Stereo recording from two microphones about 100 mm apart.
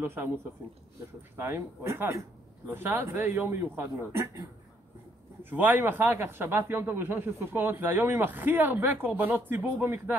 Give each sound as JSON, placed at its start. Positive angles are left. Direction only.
{"t": 0.0, "sound": "speech", "side_deg": -25}
{"t": 1.3, "sound": "speech", "side_deg": -25}